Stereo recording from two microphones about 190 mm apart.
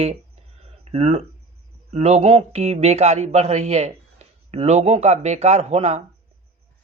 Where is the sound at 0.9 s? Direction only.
35° right (ahead or behind).